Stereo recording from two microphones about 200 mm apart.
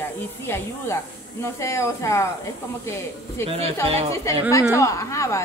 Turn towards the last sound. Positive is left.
turn(degrees=15)  # may be behind; listen again after turning